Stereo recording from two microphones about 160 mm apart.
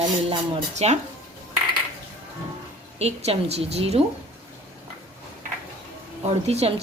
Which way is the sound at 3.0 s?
40° right (ahead or behind).